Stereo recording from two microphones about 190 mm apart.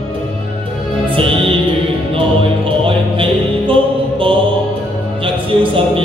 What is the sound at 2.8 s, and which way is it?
Music, 30° right (ahead or behind).